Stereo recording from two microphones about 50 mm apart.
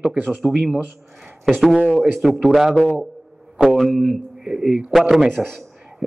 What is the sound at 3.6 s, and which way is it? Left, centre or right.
A man's voice, centre.